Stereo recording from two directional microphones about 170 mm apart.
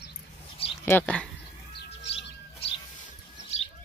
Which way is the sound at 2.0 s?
35° left (ahead or behind).